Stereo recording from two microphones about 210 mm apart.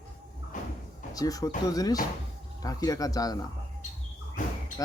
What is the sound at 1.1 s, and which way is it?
Speech, 15° left (ahead or behind).